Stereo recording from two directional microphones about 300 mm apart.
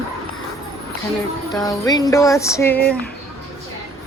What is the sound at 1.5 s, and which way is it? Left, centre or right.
Jingle bell, centre.